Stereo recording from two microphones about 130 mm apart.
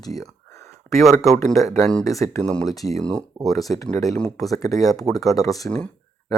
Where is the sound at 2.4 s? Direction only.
10° left (ahead or behind).